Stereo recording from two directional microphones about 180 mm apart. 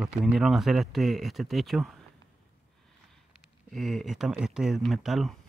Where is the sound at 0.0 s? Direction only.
Centre (ahead or behind).